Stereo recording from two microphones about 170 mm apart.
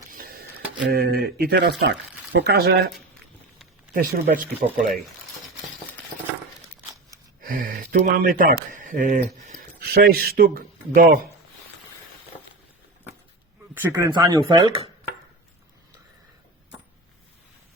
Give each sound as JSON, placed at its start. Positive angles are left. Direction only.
{"t": 0.1, "sound": "a sound", "side_deg": -60}
{"t": 2.3, "sound": "speech", "side_deg": -75}
{"t": 3.9, "sound": "speech", "side_deg": -55}
{"t": 7.4, "sound": "speech", "side_deg": -50}
{"t": 9.8, "sound": "speech", "side_deg": -65}
{"t": 13.7, "sound": "speech", "side_deg": -15}